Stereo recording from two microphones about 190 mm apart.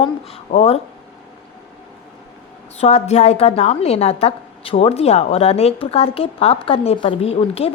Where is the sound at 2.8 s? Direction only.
35° left (ahead or behind).